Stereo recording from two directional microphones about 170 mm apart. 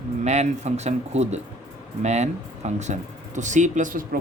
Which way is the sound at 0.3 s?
40° right (ahead or behind).